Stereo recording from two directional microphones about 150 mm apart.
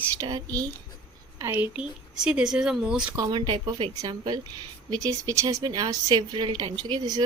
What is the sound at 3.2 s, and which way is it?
A woman's voice, 30° right (ahead or behind).